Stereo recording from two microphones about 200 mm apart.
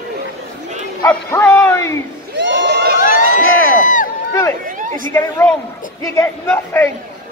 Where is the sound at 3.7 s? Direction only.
40° left (ahead or behind).